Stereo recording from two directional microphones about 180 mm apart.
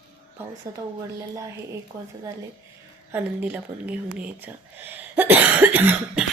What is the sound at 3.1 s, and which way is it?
A woman's voice, 10° right (ahead or behind).